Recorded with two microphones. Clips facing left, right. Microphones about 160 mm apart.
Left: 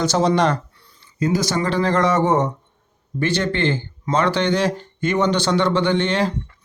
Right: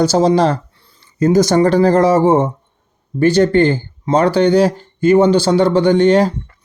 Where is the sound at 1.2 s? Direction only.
45° right (ahead or behind).